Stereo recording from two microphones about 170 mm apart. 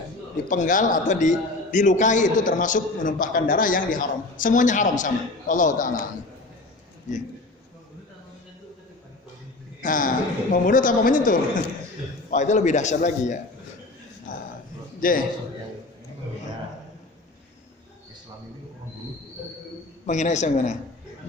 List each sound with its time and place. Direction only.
0.4 s a man's voice: 50° left (ahead or behind)
7.1 s a man's voice: 45° left (ahead or behind)
9.8 s a man's voice: 50° left (ahead or behind)
14.3 s a sound: 55° left (ahead or behind)
15.0 s a man's voice: 55° left (ahead or behind)
20.1 s a man's voice: 45° left (ahead or behind)